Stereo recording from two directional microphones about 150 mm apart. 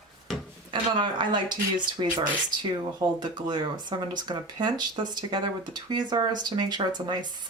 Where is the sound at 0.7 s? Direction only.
30° right (ahead or behind).